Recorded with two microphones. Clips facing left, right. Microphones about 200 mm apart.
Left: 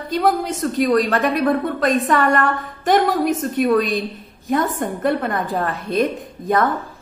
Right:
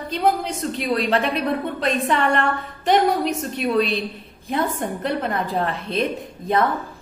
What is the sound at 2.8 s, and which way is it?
A man's voice, 50° left (ahead or behind).